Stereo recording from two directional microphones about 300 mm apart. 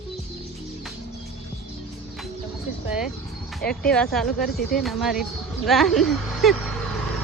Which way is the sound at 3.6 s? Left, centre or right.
Centre.